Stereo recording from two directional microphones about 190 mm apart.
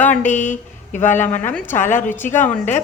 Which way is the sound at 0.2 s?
40° left (ahead or behind).